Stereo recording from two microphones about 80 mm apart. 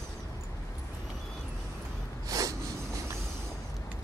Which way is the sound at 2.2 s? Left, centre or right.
Right.